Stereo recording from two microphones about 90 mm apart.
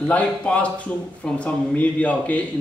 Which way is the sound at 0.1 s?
15° left (ahead or behind).